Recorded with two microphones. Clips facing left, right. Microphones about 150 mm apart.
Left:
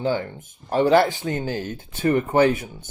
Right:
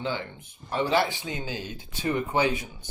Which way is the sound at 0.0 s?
45° left (ahead or behind).